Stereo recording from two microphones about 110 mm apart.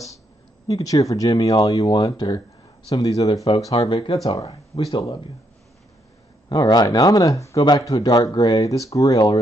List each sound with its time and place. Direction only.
0.7 s speech: 35° left (ahead or behind)
3.5 s speech: 50° left (ahead or behind)
6.5 s speech: 40° left (ahead or behind)